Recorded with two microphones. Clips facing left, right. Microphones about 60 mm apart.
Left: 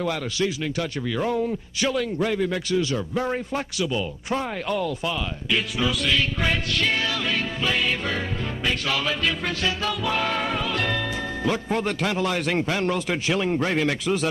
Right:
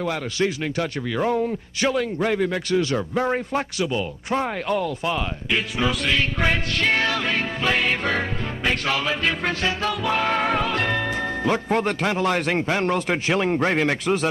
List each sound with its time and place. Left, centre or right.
0.4 s speech: right
2.3 s a man's voice: right
3.2 s speech: right
8.9 s speech: right